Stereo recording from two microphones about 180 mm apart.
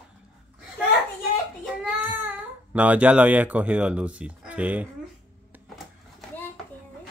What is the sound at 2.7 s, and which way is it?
Speech, 5° right (ahead or behind).